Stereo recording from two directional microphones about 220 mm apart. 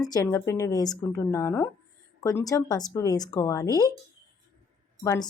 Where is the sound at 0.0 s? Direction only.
15° left (ahead or behind).